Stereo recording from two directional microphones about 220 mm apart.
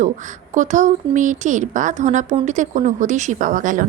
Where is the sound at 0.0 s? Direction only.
35° right (ahead or behind).